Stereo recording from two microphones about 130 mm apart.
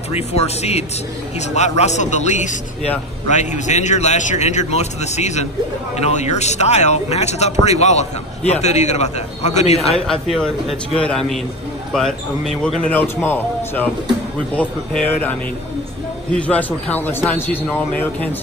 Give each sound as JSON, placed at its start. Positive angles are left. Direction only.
{"t": 0.1, "sound": "a man's voice", "side_deg": 55}
{"t": 10.0, "sound": "speech", "side_deg": 5}
{"t": 12.6, "sound": "a man's voice", "side_deg": 10}